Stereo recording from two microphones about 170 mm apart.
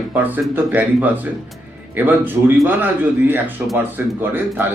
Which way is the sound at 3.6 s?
Centre (ahead or behind).